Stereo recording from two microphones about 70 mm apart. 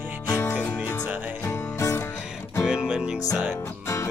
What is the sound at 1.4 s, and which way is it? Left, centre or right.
Music, left.